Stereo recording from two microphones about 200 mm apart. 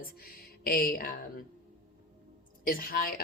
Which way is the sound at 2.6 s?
45° left (ahead or behind).